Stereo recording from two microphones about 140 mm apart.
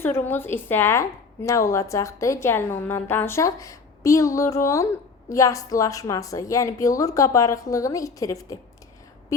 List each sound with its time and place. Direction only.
0.0 s a woman's voice: 15° left (ahead or behind)